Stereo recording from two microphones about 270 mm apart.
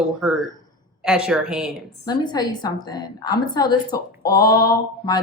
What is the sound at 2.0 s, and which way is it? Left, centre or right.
Speech, centre.